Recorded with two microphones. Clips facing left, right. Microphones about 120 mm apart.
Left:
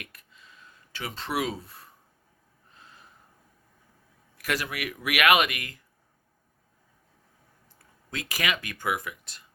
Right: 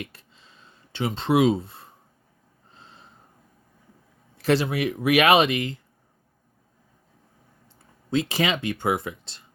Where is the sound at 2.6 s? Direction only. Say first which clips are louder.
Right 3 dB; 30° right (ahead or behind).